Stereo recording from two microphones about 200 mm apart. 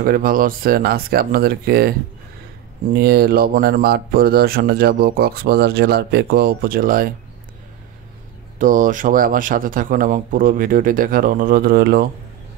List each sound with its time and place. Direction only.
0.0 s speech: 45° right (ahead or behind)
3.0 s speech: 50° right (ahead or behind)
8.5 s speech: 40° right (ahead or behind)